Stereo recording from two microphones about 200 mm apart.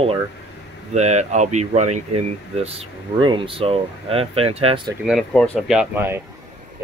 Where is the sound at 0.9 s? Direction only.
35° right (ahead or behind).